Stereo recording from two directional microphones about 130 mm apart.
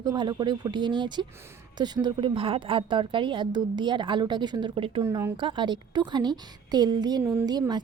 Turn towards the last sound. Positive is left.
turn(degrees=-30)  # may be behind; listen again after turning